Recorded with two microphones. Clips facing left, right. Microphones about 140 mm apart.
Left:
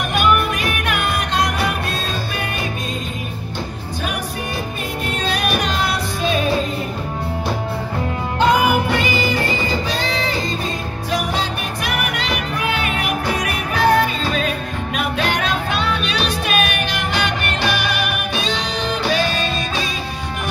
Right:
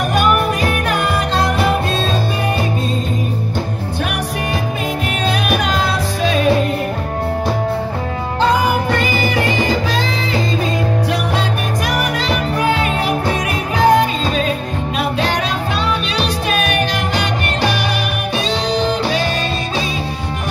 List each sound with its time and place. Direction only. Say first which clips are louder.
0.1 s music: right 1 dB; 35° right (ahead or behind)
8.4 s music: even; 30° right (ahead or behind)
11.9 s music: right 3 dB; 35° right (ahead or behind)
13.8 s music: right 3 dB; 20° right (ahead or behind)
15.0 s music: right 2 dB; 30° right (ahead or behind)